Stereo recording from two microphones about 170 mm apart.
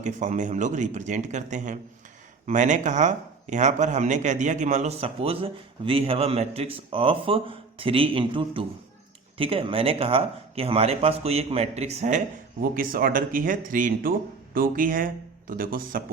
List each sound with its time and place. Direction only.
0.0 s speech: 45° right (ahead or behind)
12.7 s speech: 55° right (ahead or behind)